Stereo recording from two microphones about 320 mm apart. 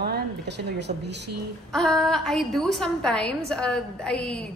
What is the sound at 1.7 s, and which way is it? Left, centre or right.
A woman's voice, centre.